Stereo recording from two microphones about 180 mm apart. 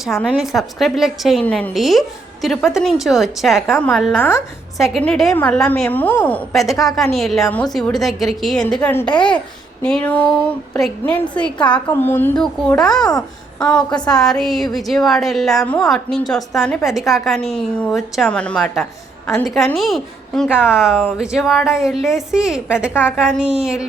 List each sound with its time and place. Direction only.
0.0 s a woman's voice: centre (ahead or behind)
4.2 s a woman's voice: 15° left (ahead or behind)
4.8 s a woman's voice: 5° left (ahead or behind)
9.1 s a woman's voice: 25° left (ahead or behind)
9.8 s a woman's voice: 5° left (ahead or behind)
11.6 s a woman's voice: 25° left (ahead or behind)
12.0 s a woman's voice: 10° left (ahead or behind)
13.9 s a woman's voice: 25° left (ahead or behind)
14.2 s a woman's voice: centre (ahead or behind)